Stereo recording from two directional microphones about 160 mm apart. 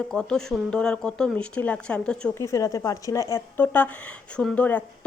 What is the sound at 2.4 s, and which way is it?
A woman's voice, 20° left (ahead or behind).